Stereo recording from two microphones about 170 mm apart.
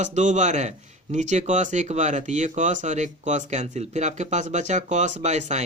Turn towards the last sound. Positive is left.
turn(degrees=-40)  # may be behind; listen again after turning